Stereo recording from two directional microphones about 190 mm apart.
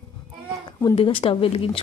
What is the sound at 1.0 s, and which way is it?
Speech, 30° left (ahead or behind).